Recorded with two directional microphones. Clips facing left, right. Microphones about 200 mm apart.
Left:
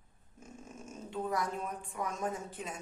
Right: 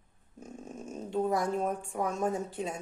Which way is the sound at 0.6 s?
40° right (ahead or behind).